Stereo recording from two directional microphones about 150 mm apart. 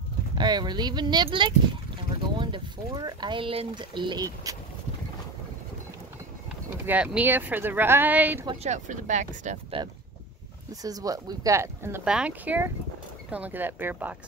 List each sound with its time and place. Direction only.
0.4 s speech: 30° right (ahead or behind)
6.9 s speech: 10° right (ahead or behind)
8.6 s speech: 55° right (ahead or behind)
10.7 s speech: 25° right (ahead or behind)
12.0 s speech: 5° right (ahead or behind)